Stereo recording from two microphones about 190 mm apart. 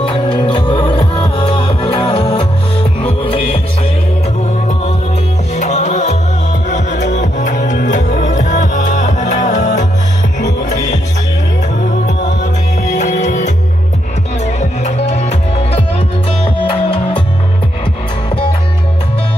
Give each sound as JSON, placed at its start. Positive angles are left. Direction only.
{"t": 0.0, "sound": "music", "side_deg": 25}
{"t": 5.6, "sound": "music", "side_deg": 40}
{"t": 12.9, "sound": "music", "side_deg": 40}